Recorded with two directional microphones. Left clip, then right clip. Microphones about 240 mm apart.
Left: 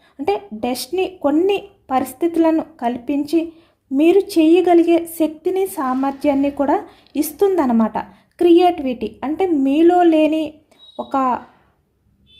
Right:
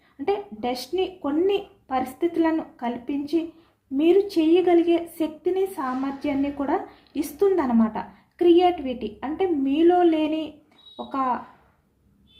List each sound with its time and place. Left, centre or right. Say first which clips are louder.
0.3 s a woman's voice: left 5 dB; left